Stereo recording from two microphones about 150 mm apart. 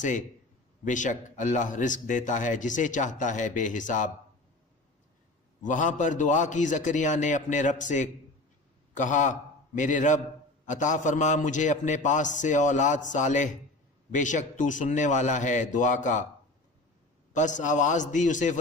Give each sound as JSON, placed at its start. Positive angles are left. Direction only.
{"t": 0.0, "sound": "a man's voice", "side_deg": 55}
{"t": 5.6, "sound": "a man's voice", "side_deg": 55}
{"t": 17.3, "sound": "a man's voice", "side_deg": 55}